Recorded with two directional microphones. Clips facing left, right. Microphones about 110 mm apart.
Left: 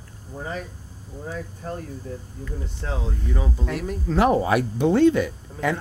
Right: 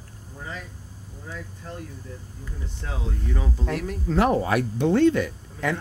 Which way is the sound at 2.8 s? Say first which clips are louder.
Left 5 dB; 40° left (ahead or behind).